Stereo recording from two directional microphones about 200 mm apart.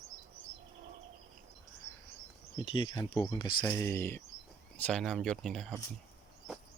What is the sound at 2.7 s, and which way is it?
Speech, 25° left (ahead or behind).